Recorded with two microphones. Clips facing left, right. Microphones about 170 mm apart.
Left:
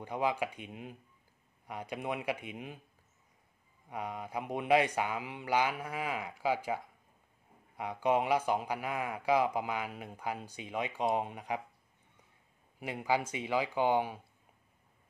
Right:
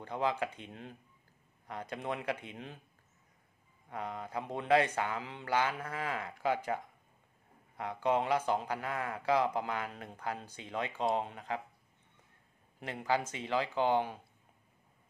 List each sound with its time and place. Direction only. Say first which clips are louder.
0.0 s speech: left 1 dB; 10° left (ahead or behind)
3.9 s speech: left 1 dB; 10° left (ahead or behind)
12.8 s speech: left 1 dB; 10° left (ahead or behind)